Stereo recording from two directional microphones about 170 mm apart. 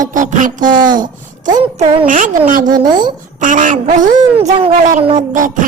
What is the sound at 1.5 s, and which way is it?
Speech, 25° right (ahead or behind).